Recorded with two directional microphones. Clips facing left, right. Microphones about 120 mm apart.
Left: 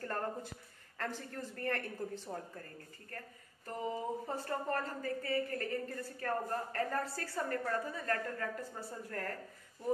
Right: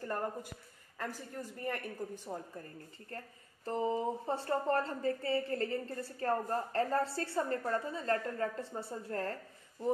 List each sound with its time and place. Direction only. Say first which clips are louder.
0.0 s speech: right 1 dB; 10° right (ahead or behind)
3.1 s a woman's voice: right 2 dB; 25° right (ahead or behind)